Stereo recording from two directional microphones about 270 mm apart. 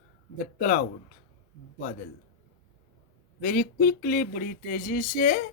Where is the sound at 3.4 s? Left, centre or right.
Left.